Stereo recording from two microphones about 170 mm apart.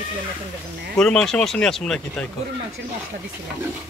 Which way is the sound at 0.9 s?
5° left (ahead or behind).